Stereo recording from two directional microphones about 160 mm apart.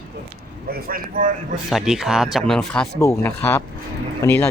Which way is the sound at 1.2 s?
55° right (ahead or behind).